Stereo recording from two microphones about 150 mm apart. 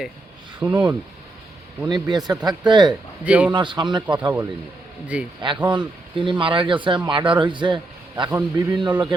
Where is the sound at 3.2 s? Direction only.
10° right (ahead or behind).